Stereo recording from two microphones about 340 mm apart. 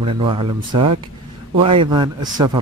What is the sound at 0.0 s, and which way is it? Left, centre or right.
Speech, centre.